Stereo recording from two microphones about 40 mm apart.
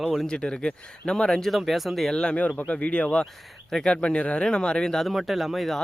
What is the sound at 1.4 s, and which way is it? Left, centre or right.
Speech, centre.